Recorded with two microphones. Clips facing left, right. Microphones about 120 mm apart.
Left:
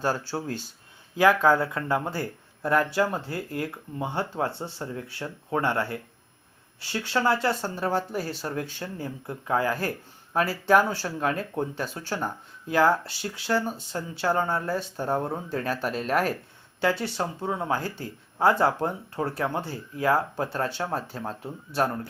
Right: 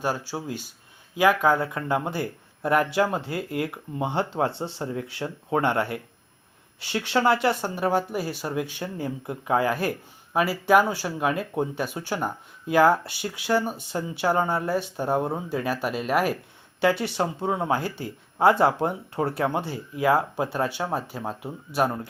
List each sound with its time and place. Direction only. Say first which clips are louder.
0.0 s speech: left 1 dB; 15° right (ahead or behind)